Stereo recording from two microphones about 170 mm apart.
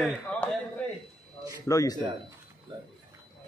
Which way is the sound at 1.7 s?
20° left (ahead or behind).